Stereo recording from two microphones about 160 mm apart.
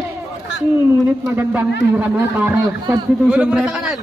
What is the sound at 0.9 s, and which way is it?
A man's voice, 15° right (ahead or behind).